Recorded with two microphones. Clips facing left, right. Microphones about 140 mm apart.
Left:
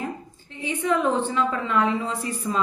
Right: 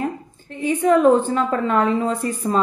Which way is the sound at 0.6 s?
45° right (ahead or behind).